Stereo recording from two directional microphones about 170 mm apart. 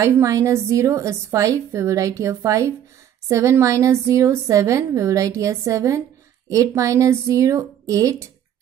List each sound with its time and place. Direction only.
0.0 s a woman's voice: 20° right (ahead or behind)